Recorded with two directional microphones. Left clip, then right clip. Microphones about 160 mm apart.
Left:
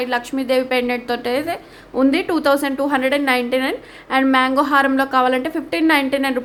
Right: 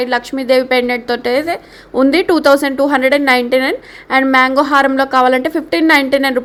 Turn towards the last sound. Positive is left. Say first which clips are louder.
# right 6 dB
turn(degrees=-30)  # may be behind; listen again after turning